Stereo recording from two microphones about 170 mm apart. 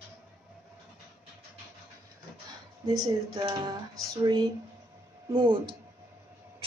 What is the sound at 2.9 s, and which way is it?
Speech, 20° right (ahead or behind).